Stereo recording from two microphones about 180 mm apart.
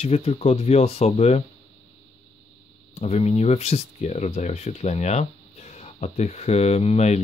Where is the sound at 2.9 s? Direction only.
35° left (ahead or behind).